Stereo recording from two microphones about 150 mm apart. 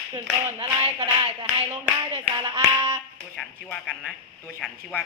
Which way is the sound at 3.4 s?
5° left (ahead or behind).